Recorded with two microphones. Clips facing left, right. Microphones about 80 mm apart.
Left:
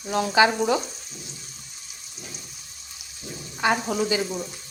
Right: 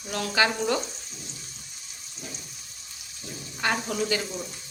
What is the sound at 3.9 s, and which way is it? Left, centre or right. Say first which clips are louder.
Frying: left 3 dB; centre.